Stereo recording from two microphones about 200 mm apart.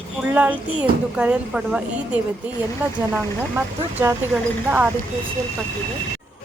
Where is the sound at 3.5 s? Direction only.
10° right (ahead or behind).